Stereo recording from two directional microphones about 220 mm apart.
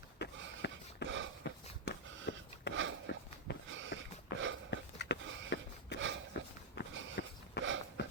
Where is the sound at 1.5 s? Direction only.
50° left (ahead or behind).